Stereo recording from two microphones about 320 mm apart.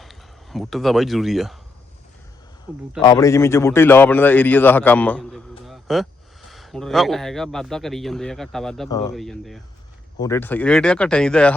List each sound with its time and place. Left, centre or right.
0.0 s speech: centre
2.7 s a man's voice: centre
3.0 s a man's voice: centre
9.1 s a man's voice: centre